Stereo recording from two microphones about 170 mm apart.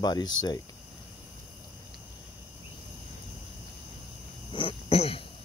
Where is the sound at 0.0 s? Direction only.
25° left (ahead or behind).